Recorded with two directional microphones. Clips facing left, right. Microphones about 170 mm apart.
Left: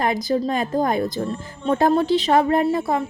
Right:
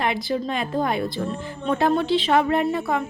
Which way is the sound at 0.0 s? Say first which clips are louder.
Left 3 dB; 40° left (ahead or behind).